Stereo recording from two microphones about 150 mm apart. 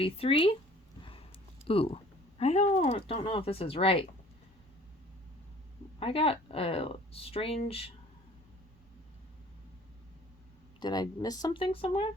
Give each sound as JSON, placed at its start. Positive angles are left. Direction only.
{"t": 0.0, "sound": "speech", "side_deg": 40}
{"t": 1.6, "sound": "speech", "side_deg": 40}
{"t": 2.4, "sound": "speech", "side_deg": 50}
{"t": 6.0, "sound": "speech", "side_deg": 40}
{"t": 10.8, "sound": "speech", "side_deg": 25}